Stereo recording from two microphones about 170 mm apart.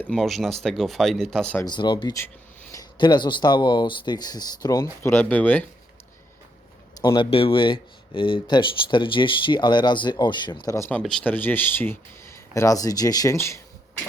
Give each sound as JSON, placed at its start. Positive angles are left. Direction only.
{"t": 0.0, "sound": "speech", "side_deg": 5}
{"t": 1.6, "sound": "speech", "side_deg": 25}
{"t": 7.0, "sound": "speech", "side_deg": 30}